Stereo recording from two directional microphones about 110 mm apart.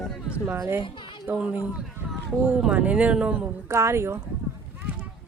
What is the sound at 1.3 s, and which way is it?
Speech, 15° right (ahead or behind).